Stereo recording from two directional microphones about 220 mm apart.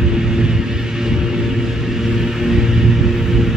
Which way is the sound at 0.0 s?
5° right (ahead or behind).